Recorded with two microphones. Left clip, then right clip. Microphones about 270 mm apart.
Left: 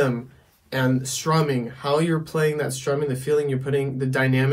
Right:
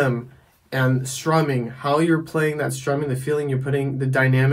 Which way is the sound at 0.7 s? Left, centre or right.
Centre.